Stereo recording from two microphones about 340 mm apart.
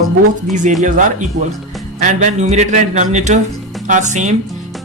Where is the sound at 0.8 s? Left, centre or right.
Right.